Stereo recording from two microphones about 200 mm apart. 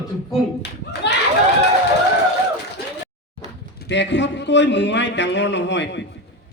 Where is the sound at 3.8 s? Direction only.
60° left (ahead or behind).